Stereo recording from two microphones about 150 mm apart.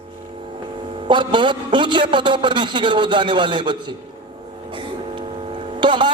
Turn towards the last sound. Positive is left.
turn(degrees=-30)  # may be behind; listen again after turning